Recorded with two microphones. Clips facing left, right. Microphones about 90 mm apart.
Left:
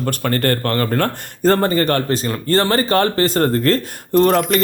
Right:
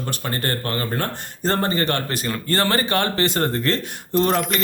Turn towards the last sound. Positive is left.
turn(degrees=45)  # may be behind; listen again after turning